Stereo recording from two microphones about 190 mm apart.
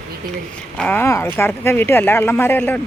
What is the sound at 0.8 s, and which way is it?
Speech, 10° left (ahead or behind).